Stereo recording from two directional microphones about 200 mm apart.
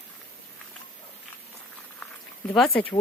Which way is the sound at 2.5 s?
5° left (ahead or behind).